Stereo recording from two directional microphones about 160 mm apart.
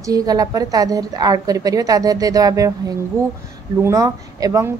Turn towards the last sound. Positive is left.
turn(degrees=-20)  # may be behind; listen again after turning